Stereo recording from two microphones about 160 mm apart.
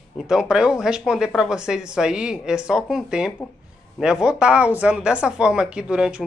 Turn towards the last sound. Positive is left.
turn(degrees=-5)  # may be behind; listen again after turning